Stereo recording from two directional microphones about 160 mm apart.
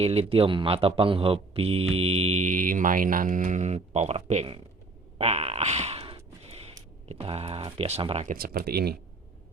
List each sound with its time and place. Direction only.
0.0 s speech: 40° right (ahead or behind)
5.1 s a sound: 40° right (ahead or behind)
7.1 s speech: 40° right (ahead or behind)
8.3 s speech: 65° right (ahead or behind); by 9.0 s 80° right